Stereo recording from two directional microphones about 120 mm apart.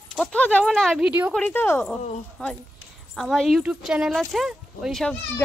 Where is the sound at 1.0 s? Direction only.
10° right (ahead or behind).